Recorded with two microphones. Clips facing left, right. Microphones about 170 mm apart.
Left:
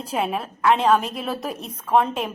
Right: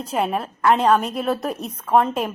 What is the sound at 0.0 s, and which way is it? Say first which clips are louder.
A woman's voice: right 2 dB; centre (ahead or behind).